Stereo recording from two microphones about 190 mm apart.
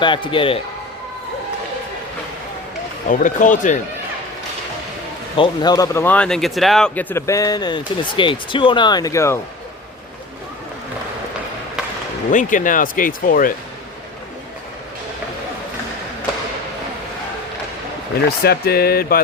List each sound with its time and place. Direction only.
0.0 s speech: 25° left (ahead or behind)
3.1 s speech: 45° left (ahead or behind)
5.4 s speech: 20° left (ahead or behind)
12.3 s speech: 40° left (ahead or behind)
18.4 s speech: 55° left (ahead or behind)